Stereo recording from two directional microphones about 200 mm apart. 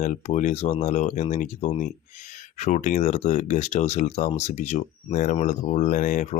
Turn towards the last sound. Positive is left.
turn(degrees=40)  # may be behind; listen again after turning